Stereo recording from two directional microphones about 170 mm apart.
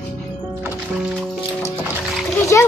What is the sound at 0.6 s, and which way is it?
Music, 15° right (ahead or behind).